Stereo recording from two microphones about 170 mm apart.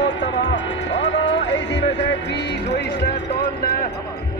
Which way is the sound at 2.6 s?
85° left.